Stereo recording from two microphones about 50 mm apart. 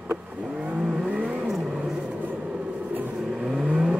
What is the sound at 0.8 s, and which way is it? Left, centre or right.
Vehicle, centre.